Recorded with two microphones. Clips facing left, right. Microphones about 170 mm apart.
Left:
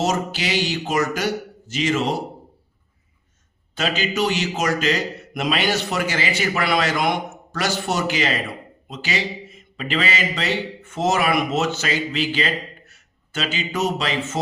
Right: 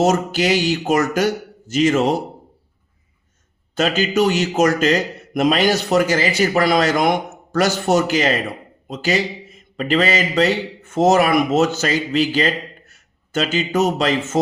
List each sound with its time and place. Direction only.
0.0 s a man's voice: 50° right (ahead or behind)
3.8 s a man's voice: 45° right (ahead or behind)